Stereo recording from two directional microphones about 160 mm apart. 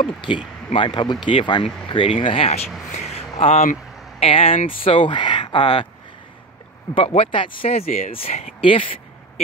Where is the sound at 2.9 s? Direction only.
45° left (ahead or behind).